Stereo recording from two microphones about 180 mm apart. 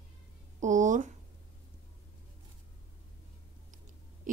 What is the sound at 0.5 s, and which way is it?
Speech, 45° right (ahead or behind).